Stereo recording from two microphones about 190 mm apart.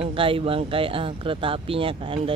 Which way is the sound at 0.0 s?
30° right (ahead or behind).